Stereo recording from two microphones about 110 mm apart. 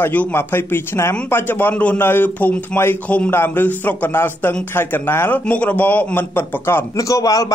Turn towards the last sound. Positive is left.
turn(degrees=35)  # may be behind; listen again after turning